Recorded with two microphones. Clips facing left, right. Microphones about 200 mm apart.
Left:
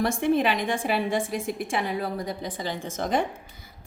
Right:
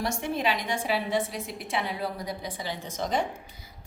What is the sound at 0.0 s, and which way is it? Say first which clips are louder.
A woman's voice: left 6 dB; 55° left (ahead or behind).